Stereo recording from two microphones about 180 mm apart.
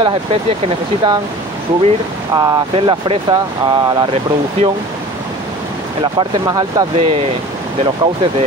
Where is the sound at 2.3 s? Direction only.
25° right (ahead or behind).